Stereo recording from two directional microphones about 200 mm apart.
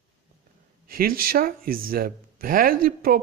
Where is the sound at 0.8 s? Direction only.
45° right (ahead or behind).